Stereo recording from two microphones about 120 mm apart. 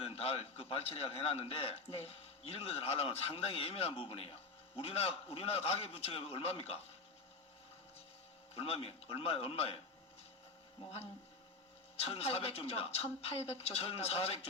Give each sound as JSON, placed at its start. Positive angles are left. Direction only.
{"t": 0.0, "sound": "a man's voice", "side_deg": 55}
{"t": 8.5, "sound": "a woman's voice", "side_deg": 55}